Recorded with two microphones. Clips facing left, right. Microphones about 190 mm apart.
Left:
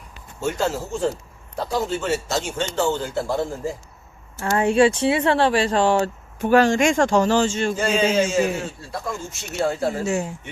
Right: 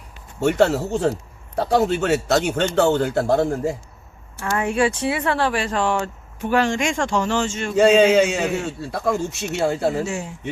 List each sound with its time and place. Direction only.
0.3 s a man's voice: 70° right (ahead or behind)
4.4 s speech: 30° left (ahead or behind)
6.4 s speech: 40° left (ahead or behind)
7.8 s a man's voice: 65° right (ahead or behind)